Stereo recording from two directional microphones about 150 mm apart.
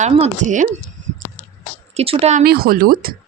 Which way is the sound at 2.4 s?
90° right.